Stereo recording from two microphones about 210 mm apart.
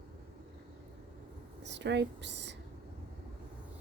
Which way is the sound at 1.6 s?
55° right (ahead or behind).